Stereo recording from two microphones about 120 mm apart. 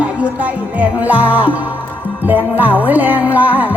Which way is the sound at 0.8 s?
10° right (ahead or behind).